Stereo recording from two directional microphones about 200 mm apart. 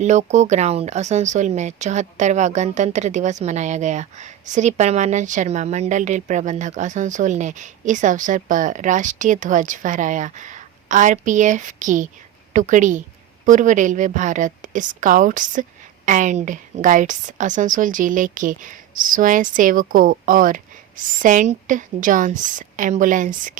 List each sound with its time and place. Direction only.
0.0 s speech: 35° right (ahead or behind)